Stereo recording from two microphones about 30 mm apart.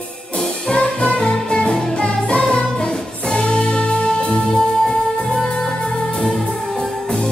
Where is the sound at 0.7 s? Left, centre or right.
Left.